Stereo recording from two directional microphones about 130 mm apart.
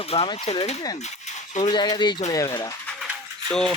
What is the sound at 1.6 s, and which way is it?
Speech, 35° left (ahead or behind).